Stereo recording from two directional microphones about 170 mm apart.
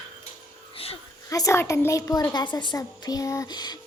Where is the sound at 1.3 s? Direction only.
20° left (ahead or behind).